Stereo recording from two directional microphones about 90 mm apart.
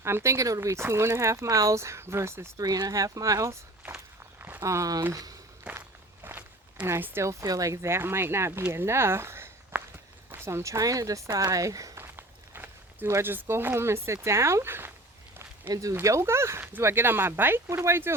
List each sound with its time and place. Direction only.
0.0 s speech: 30° right (ahead or behind)
2.6 s speech: 45° right (ahead or behind)
4.4 s walk: 25° right (ahead or behind)
4.6 s speech: 35° right (ahead or behind)
6.2 s speech: 20° right (ahead or behind)
8.7 s a sound: 30° right (ahead or behind)
10.3 s speech: 30° right (ahead or behind)
12.0 s walk: 25° right (ahead or behind)
13.1 s speech: 25° right (ahead or behind)
15.7 s speech: 40° right (ahead or behind)